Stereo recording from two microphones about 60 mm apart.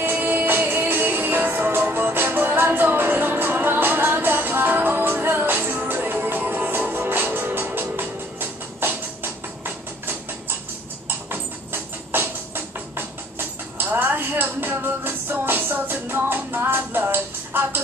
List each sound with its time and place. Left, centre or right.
0.0 s music: right